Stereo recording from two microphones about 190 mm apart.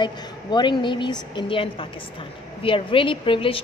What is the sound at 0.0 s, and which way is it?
A woman's voice, 25° left (ahead or behind).